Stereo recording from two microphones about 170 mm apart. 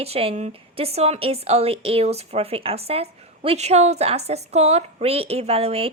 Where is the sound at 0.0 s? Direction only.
35° right (ahead or behind).